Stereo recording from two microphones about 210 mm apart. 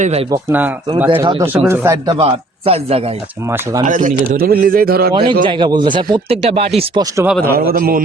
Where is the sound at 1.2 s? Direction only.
20° right (ahead or behind).